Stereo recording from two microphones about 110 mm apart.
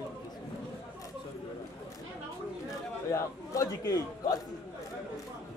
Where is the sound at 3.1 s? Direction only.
30° left (ahead or behind).